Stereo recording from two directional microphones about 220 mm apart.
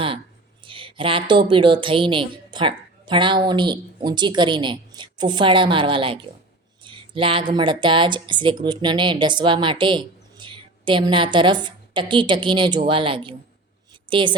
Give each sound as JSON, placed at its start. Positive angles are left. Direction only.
{"t": 0.6, "sound": "a woman's voice", "side_deg": -25}